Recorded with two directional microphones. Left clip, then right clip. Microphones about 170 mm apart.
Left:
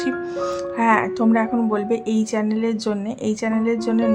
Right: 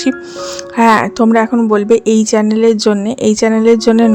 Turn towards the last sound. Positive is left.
turn(degrees=-50)  # may be behind; listen again after turning